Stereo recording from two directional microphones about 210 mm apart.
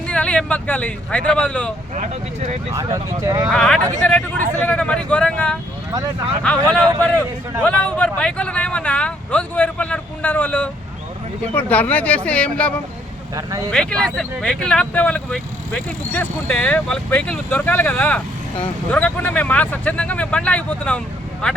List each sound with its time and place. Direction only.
0.1 s speech: 5° left (ahead or behind)
2.7 s speech: 15° right (ahead or behind)
3.5 s speech: 5° left (ahead or behind)
5.9 s speech: 20° right (ahead or behind)
6.5 s speech: 5° left (ahead or behind)
13.3 s speech: 15° right (ahead or behind)
13.7 s speech: 5° left (ahead or behind)